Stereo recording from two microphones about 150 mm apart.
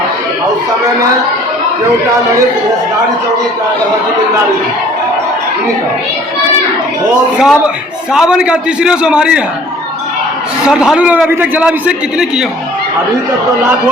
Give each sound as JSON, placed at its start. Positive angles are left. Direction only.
{"t": 7.1, "sound": "a man's voice", "side_deg": -5}
{"t": 10.6, "sound": "a man's voice", "side_deg": -5}